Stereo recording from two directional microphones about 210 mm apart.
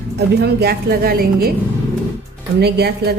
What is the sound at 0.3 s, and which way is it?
Speech, 50° right (ahead or behind).